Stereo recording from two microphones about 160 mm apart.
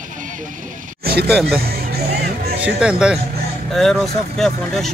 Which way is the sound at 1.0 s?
80° right.